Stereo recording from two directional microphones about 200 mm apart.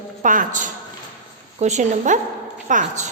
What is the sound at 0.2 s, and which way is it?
A woman's voice, 40° right (ahead or behind).